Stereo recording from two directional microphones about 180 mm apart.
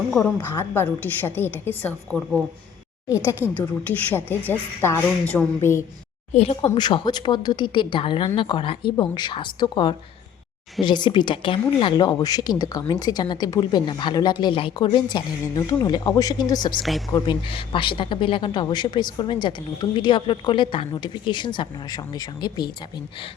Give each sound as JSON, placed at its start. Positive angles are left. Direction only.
{"t": 0.2, "sound": "a woman's voice", "side_deg": 15}
{"t": 6.3, "sound": "speech", "side_deg": 35}